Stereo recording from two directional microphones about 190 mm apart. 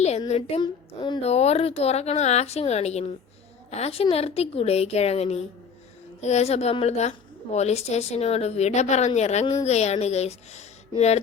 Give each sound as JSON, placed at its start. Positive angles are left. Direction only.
{"t": 0.3, "sound": "a woman's voice", "side_deg": 35}